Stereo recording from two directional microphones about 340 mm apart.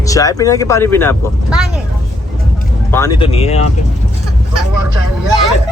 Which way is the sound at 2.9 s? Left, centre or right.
Centre.